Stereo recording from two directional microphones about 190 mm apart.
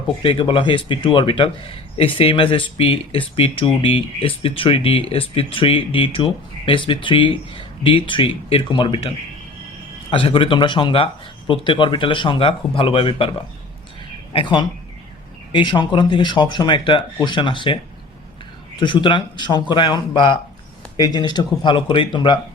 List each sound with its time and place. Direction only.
0.2 s a man's voice: 25° left (ahead or behind)
14.3 s a man's voice: 25° left (ahead or behind)
18.8 s a man's voice: 25° left (ahead or behind)